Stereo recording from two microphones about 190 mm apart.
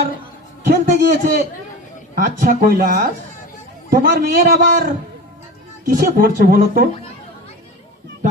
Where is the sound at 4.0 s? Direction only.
50° right (ahead or behind).